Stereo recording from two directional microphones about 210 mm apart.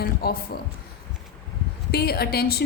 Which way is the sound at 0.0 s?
45° left (ahead or behind).